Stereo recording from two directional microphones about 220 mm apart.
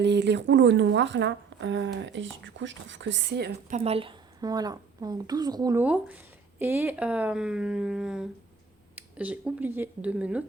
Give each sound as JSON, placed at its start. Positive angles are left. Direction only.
{"t": 0.0, "sound": "a woman's voice", "side_deg": -50}
{"t": 3.8, "sound": "a woman's voice", "side_deg": -25}